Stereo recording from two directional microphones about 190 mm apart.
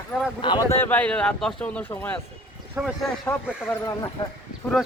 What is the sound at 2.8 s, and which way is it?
Speech, 10° right (ahead or behind).